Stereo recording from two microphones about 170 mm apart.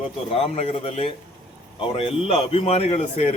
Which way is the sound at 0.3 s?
35° left (ahead or behind).